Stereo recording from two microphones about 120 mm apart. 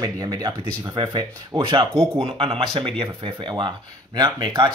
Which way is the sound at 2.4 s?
55° right (ahead or behind).